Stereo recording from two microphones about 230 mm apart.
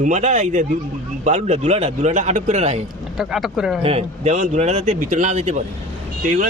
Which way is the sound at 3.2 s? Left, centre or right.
Centre.